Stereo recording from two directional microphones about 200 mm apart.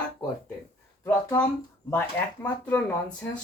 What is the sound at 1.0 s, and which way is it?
Speech, 15° left (ahead or behind).